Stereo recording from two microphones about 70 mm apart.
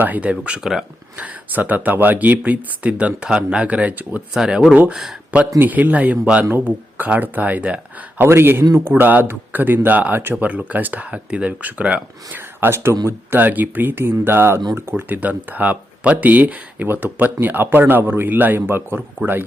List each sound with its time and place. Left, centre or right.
0.0 s speech: right
4.4 s speech: centre
5.5 s speech: right
8.2 s speech: right; by 11.9 s centre
12.3 s speech: right
15.2 s speech: right